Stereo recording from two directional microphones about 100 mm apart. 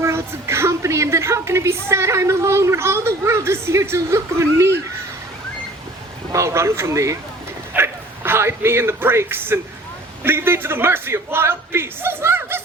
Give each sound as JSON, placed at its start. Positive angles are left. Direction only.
{"t": 0.0, "sound": "a woman's voice", "side_deg": -25}
{"t": 6.3, "sound": "a woman's voice", "side_deg": -30}
{"t": 7.7, "sound": "a sound", "side_deg": -25}
{"t": 10.2, "sound": "a woman's voice", "side_deg": -25}